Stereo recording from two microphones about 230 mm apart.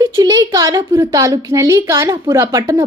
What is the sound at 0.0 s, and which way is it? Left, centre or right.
A child's voice, centre.